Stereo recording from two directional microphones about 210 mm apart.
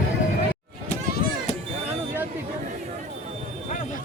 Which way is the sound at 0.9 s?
35° left (ahead or behind).